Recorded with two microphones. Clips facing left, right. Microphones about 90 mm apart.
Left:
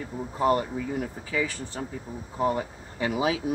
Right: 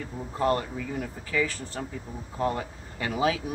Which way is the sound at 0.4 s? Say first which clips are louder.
Left 2 dB; 15° left (ahead or behind).